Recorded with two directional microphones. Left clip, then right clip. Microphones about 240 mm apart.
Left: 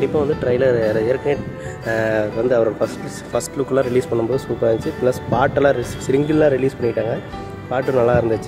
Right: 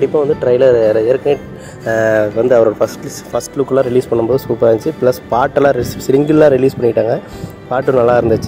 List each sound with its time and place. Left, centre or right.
0.1 s speech: centre
0.5 s speech: centre